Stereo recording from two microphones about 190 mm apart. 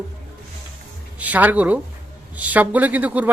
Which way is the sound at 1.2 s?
10° right (ahead or behind).